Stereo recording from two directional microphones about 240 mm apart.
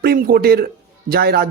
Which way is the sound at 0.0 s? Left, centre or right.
Right.